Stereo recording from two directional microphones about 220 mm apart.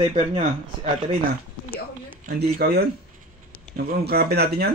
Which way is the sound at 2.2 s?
40° right (ahead or behind).